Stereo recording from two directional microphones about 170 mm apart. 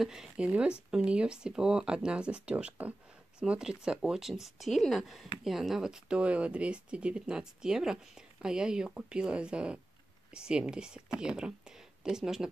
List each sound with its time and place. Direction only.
0.0 s speech: 5° right (ahead or behind)